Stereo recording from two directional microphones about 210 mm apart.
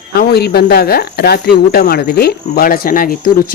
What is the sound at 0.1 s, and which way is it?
Speech, 50° left (ahead or behind).